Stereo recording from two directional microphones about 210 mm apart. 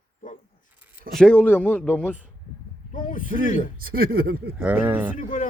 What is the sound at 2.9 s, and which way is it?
Speech, 40° left (ahead or behind).